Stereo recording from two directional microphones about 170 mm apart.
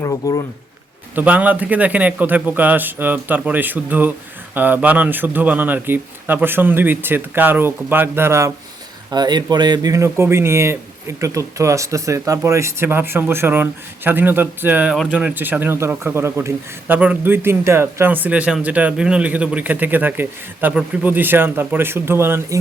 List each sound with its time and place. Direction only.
0.0 s speech: 20° left (ahead or behind)
1.1 s speech: 10° right (ahead or behind)